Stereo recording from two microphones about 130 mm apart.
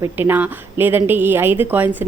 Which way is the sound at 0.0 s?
15° right (ahead or behind).